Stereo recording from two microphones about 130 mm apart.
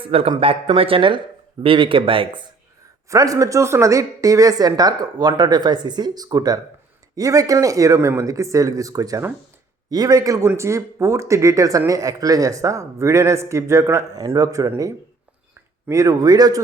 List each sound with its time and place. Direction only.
0.0 s speech: 45° right (ahead or behind)
3.1 s a woman's voice: 25° right (ahead or behind)
15.9 s a woman's voice: 25° right (ahead or behind)